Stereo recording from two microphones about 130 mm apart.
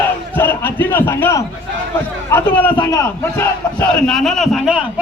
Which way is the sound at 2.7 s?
35° left (ahead or behind).